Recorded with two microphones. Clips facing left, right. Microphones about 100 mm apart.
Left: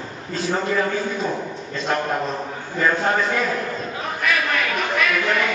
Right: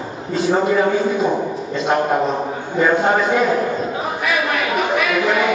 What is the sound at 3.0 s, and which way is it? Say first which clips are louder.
Speech: right 5 dB; 5° right (ahead or behind).